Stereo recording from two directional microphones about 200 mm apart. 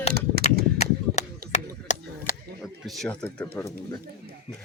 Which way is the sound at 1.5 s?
35° left (ahead or behind).